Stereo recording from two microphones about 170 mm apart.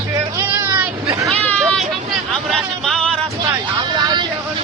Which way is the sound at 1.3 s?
5° left (ahead or behind).